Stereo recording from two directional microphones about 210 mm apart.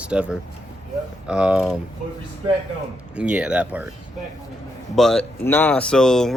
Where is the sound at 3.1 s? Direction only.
5° right (ahead or behind).